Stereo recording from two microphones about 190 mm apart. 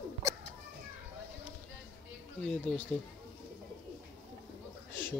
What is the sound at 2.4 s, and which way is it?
Speech, 5° left (ahead or behind).